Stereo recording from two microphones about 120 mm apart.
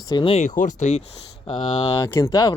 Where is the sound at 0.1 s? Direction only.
40° left (ahead or behind).